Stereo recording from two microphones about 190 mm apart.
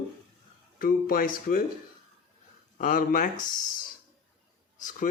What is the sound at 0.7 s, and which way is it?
Speech, 50° left (ahead or behind).